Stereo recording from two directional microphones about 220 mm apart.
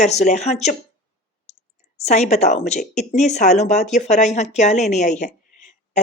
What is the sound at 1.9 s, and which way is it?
Speech, 30° left (ahead or behind).